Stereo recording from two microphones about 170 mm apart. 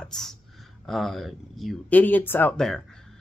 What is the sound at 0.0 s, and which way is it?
A man's voice, 5° left (ahead or behind).